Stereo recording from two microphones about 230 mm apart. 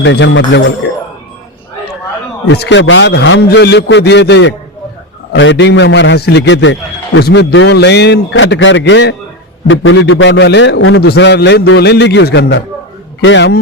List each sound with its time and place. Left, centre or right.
0.0 s a man's voice: left
2.5 s a man's voice: left